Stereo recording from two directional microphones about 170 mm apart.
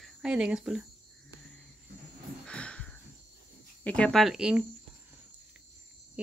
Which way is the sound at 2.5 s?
5° left (ahead or behind).